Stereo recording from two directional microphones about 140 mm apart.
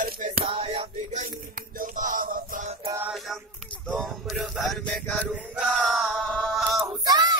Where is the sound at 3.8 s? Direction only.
Centre (ahead or behind).